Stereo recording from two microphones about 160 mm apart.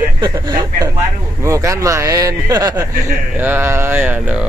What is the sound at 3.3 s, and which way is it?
Mantra, 10° right (ahead or behind).